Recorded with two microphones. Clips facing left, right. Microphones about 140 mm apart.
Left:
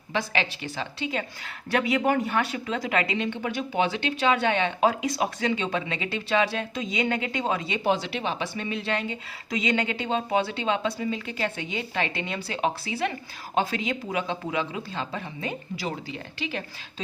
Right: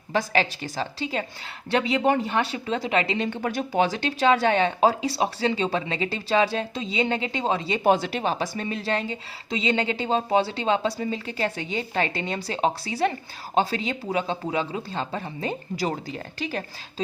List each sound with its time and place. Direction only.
0.1 s a woman's voice: 40° right (ahead or behind)
3.2 s a woman's voice: 45° right (ahead or behind)
7.9 s a woman's voice: 45° right (ahead or behind)